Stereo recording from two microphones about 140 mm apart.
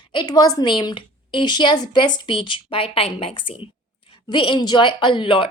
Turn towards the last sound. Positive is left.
turn(degrees=40)  # may be behind; listen again after turning